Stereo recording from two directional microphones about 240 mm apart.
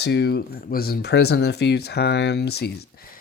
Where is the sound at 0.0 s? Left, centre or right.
Left.